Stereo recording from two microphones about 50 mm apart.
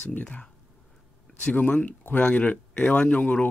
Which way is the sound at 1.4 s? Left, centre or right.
Left.